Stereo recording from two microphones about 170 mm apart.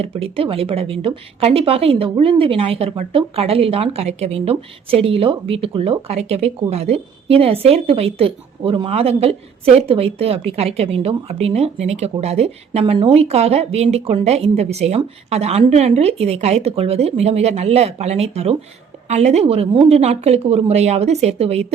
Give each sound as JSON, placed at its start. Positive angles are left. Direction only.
{"t": 0.0, "sound": "speech", "side_deg": -35}